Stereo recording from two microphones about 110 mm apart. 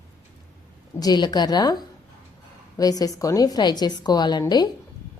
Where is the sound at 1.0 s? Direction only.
40° left (ahead or behind).